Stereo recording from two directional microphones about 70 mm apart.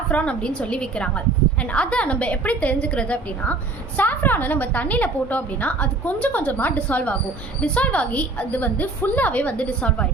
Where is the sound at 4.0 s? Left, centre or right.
Left.